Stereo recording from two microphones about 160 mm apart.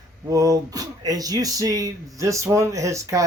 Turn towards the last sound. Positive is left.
turn(degrees=-20)  # may be behind; listen again after turning